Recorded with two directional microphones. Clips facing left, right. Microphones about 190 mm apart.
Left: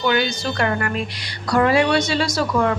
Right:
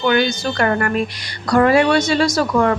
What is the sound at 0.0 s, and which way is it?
Speech, 50° right (ahead or behind).